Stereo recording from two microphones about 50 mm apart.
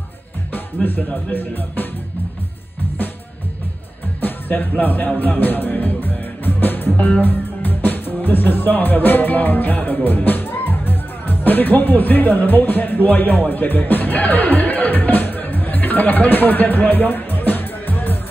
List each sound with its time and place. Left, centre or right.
0.8 s speech: left
4.2 s music: left
7.2 s speech: left